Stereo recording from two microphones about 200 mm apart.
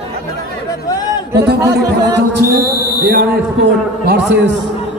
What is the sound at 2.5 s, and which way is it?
Speech, 50° right (ahead or behind).